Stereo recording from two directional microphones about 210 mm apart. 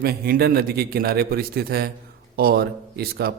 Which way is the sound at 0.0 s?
45° right (ahead or behind).